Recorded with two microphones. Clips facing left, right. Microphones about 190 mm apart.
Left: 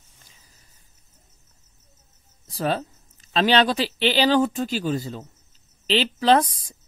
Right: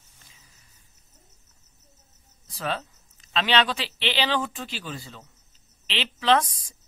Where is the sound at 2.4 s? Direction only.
40° left (ahead or behind).